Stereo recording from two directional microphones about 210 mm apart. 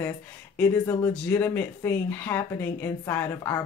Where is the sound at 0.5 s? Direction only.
10° left (ahead or behind).